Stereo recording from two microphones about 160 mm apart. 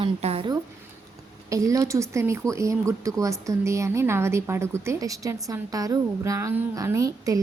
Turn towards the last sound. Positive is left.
turn(degrees=-20)  # may be behind; listen again after turning